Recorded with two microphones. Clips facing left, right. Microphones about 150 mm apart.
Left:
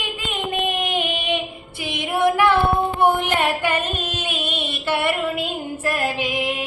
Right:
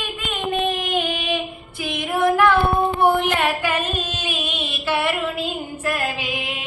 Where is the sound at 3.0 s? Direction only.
10° left (ahead or behind).